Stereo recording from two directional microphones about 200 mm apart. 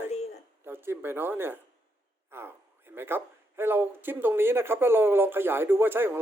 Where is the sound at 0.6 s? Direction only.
10° right (ahead or behind).